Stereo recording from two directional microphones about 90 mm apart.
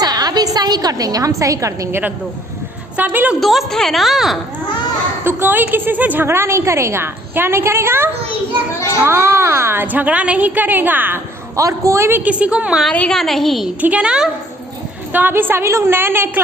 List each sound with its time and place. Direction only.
0.0 s a woman's voice: 45° right (ahead or behind)
1.9 s a woman's voice: 20° right (ahead or behind)
3.4 s a woman's voice: centre (ahead or behind)
5.2 s a woman's voice: 25° right (ahead or behind)
9.8 s a woman's voice: 15° right (ahead or behind)
11.5 s a woman's voice: 35° right (ahead or behind); by 12.8 s 10° right (ahead or behind)
12.9 s a woman's voice: 10° left (ahead or behind)
13.8 s a child's voice: 15° right (ahead or behind)
15.1 s a woman's voice: 20° right (ahead or behind)